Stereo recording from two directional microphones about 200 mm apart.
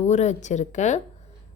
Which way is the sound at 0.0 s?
35° left (ahead or behind).